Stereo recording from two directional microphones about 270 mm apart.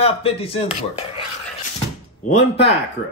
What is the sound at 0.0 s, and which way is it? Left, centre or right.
A man's voice, left.